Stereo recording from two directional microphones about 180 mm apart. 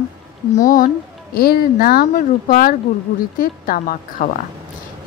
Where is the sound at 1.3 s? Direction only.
55° left (ahead or behind).